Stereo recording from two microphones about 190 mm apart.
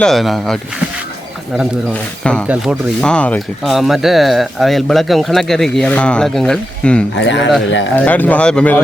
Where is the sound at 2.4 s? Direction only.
5° right (ahead or behind).